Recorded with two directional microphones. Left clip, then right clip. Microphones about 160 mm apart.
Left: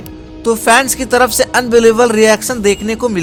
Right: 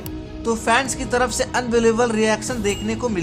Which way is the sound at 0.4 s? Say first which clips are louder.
Left 9 dB; 45° left (ahead or behind).